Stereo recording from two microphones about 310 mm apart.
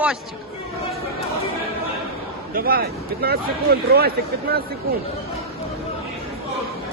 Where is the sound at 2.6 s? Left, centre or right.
Right.